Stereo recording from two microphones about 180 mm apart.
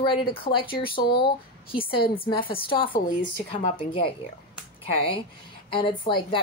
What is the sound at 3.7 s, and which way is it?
A woman's voice, 30° left (ahead or behind).